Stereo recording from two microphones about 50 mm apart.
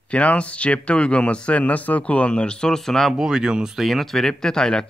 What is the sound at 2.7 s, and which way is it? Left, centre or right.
Speech, centre.